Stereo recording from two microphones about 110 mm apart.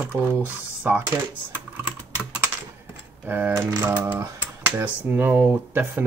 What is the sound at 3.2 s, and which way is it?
Speech, 15° right (ahead or behind).